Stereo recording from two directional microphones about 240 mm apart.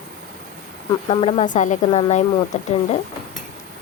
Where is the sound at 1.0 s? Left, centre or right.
Left.